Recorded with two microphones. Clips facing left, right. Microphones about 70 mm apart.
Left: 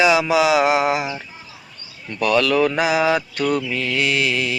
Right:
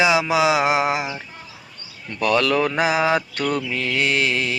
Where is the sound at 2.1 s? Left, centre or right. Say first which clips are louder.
Left 2 dB; right.